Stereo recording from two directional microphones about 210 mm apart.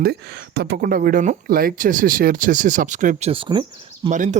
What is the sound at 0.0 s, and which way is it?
A woman's voice, 50° right (ahead or behind).